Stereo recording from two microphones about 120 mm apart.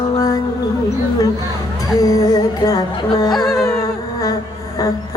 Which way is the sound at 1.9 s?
30° left (ahead or behind).